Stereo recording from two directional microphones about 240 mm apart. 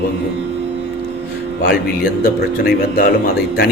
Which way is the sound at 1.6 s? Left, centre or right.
Left.